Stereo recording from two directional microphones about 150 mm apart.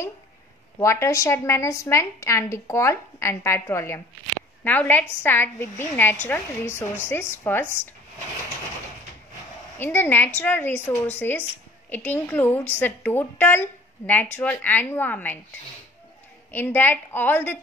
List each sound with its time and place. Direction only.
0.7 s a woman's voice: 20° left (ahead or behind)
9.8 s a woman's voice: 15° left (ahead or behind)
16.5 s a woman's voice: 15° left (ahead or behind)